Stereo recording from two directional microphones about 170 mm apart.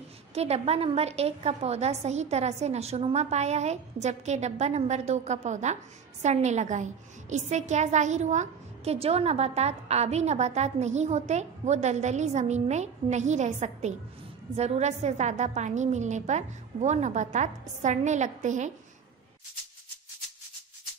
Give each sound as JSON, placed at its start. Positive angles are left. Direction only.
{"t": 0.3, "sound": "a woman's voice", "side_deg": -35}